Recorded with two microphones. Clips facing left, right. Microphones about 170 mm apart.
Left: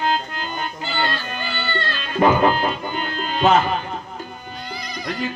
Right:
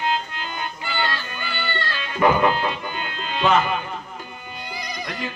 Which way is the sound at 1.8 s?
30° left (ahead or behind).